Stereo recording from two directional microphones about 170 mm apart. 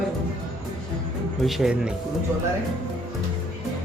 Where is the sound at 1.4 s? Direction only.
Centre (ahead or behind).